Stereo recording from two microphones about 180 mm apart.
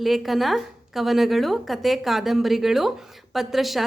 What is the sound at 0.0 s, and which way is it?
A woman's voice, centre (ahead or behind).